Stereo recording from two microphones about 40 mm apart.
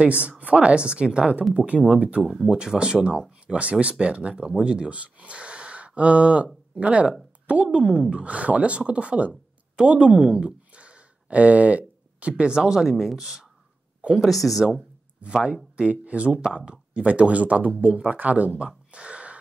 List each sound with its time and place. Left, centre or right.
0.0 s a woman's voice: right
2.4 s a woman's voice: centre
3.5 s speech: centre
4.0 s a woman's voice: right
10.3 s a sound: right
12.4 s a woman's voice: centre
12.9 s speech: centre
14.2 s speech: centre
15.2 s a woman's voice: right
16.4 s a woman's voice: right
16.9 s speech: right
18.6 s gasp: right